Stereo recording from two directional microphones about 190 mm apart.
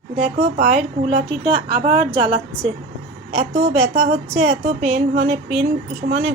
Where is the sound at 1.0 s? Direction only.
30° right (ahead or behind).